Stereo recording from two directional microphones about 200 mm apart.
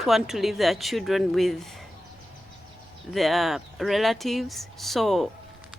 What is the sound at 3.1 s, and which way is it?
Speech, centre (ahead or behind).